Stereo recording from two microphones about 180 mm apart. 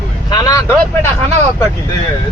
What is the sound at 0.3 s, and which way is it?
Vehicle, 20° left (ahead or behind).